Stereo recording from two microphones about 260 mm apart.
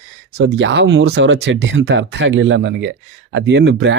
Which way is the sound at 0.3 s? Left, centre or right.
Right.